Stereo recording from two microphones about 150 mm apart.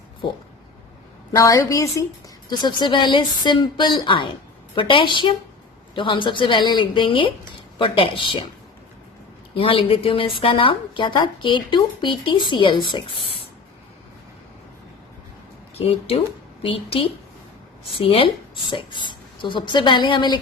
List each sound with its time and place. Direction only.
1.4 s a woman's voice: 20° left (ahead or behind)
9.6 s a woman's voice: 35° left (ahead or behind)
15.7 s a woman's voice: 40° left (ahead or behind)